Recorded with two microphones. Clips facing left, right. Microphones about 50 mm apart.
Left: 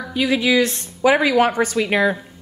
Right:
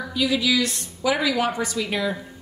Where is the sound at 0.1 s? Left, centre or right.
Left.